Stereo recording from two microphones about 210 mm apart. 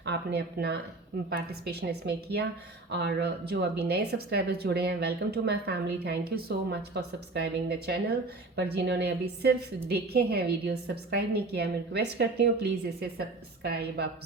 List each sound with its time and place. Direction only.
0.0 s speech: 55° right (ahead or behind)